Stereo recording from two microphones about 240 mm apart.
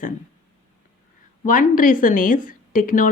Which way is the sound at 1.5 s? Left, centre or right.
Left.